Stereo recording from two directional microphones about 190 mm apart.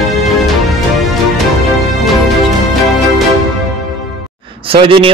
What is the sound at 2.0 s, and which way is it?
Music, centre (ahead or behind).